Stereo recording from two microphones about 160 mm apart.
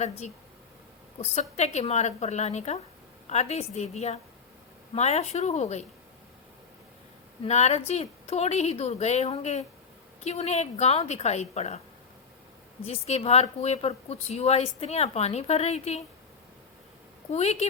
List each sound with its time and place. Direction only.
1.2 s a woman's voice: 45° left (ahead or behind)
7.4 s speech: 40° left (ahead or behind)
12.8 s a woman's voice: 40° left (ahead or behind)
17.3 s a woman's voice: 40° left (ahead or behind)